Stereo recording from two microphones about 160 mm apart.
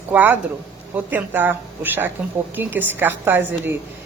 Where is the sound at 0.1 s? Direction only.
10° right (ahead or behind).